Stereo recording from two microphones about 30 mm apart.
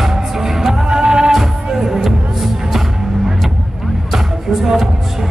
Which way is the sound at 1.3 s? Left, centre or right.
Centre.